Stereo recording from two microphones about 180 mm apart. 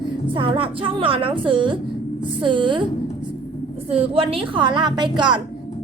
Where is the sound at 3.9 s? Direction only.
30° right (ahead or behind).